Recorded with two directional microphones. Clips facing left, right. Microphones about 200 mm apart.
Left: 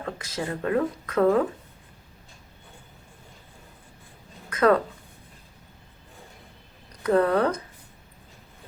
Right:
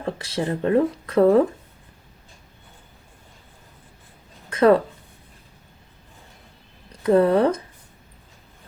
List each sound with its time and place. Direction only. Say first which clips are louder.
0.0 s speech: right 5 dB; 30° right (ahead or behind)
4.4 s a sound: right 4 dB; 30° right (ahead or behind)
7.0 s speech: right 4 dB; 25° right (ahead or behind)